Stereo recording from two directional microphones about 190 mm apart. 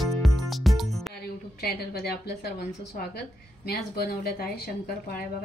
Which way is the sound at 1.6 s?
55° left (ahead or behind).